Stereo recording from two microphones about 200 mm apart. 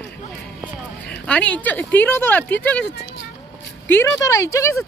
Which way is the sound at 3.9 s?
10° left (ahead or behind).